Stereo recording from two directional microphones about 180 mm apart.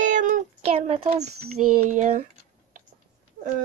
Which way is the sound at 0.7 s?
30° right (ahead or behind).